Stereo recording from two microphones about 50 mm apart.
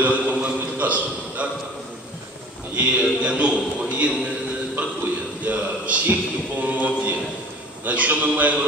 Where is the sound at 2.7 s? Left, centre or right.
Right.